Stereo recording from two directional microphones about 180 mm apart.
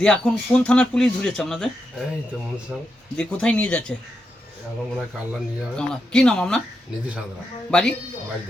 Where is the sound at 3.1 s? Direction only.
5° left (ahead or behind).